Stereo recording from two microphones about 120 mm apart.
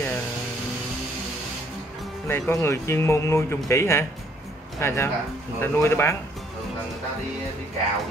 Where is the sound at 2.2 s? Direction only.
20° left (ahead or behind).